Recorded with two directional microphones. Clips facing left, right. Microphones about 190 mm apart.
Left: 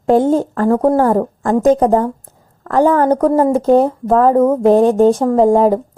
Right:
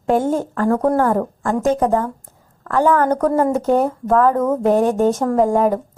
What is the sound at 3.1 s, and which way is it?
Speech, 30° left (ahead or behind).